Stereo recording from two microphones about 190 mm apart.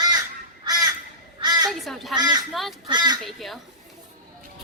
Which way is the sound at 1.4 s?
20° right (ahead or behind).